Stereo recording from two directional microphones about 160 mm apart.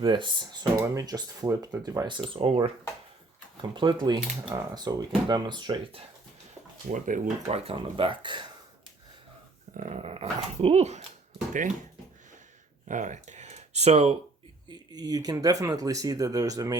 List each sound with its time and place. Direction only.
0.0 s speech: 30° right (ahead or behind)
6.9 s speech: 55° right (ahead or behind); by 8.4 s 30° right (ahead or behind)
9.7 s speech: 45° right (ahead or behind)
12.9 s speech: 50° right (ahead or behind)
14.7 s speech: 25° right (ahead or behind)